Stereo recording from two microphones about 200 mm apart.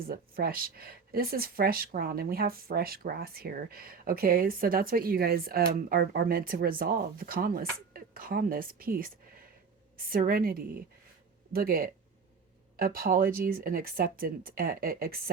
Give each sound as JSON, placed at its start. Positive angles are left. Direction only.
{"t": 0.1, "sound": "speech", "side_deg": -50}